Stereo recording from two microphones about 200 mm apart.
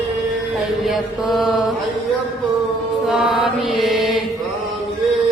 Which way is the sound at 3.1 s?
Centre (ahead or behind).